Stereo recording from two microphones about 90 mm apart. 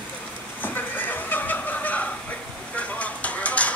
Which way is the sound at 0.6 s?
20° left (ahead or behind).